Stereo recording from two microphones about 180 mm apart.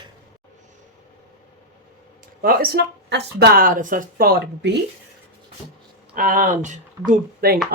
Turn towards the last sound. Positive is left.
turn(degrees=-60)  # may be behind; listen again after turning